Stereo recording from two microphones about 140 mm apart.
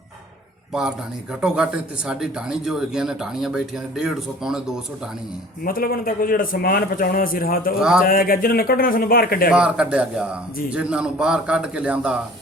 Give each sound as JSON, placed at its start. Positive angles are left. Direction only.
{"t": 0.7, "sound": "a man's voice", "side_deg": -5}
{"t": 5.6, "sound": "a man's voice", "side_deg": 90}
{"t": 7.8, "sound": "speech", "side_deg": -5}
{"t": 8.0, "sound": "a man's voice", "side_deg": 90}
{"t": 9.5, "sound": "a man's voice", "side_deg": -5}